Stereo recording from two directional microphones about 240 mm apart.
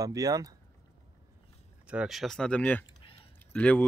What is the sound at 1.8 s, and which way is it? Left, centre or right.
Speech, centre.